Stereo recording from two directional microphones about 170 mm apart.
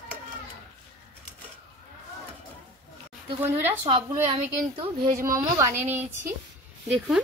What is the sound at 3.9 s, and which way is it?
A woman's voice, 30° right (ahead or behind).